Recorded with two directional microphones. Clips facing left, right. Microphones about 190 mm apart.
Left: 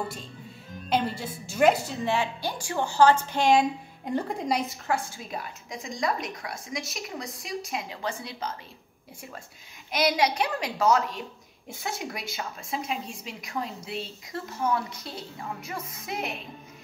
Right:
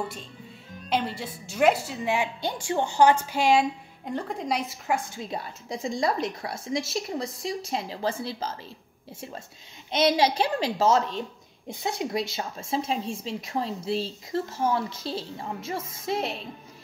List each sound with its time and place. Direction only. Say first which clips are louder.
0.8 s a woman's voice: left 1 dB; centre (ahead or behind); by 5.2 s 15° right (ahead or behind)
5.3 s speech: right 3 dB; 30° right (ahead or behind)
9.8 s speech: right 3 dB; 25° right (ahead or behind)